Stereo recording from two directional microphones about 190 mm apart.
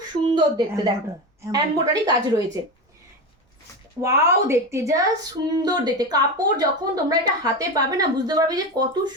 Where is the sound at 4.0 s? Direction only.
15° right (ahead or behind).